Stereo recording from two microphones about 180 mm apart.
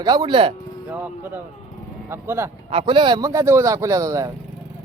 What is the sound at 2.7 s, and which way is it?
Speech, 30° right (ahead or behind).